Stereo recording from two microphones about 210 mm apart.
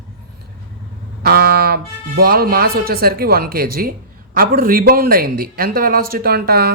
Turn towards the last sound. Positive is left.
turn(degrees=-50)  # may be behind; listen again after turning